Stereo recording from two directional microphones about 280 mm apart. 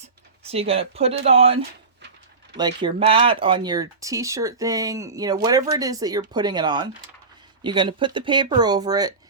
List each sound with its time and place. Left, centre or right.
0.5 s speech: right
2.6 s speech: centre